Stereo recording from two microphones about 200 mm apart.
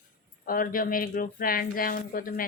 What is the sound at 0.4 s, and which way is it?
Speech, 45° left (ahead or behind).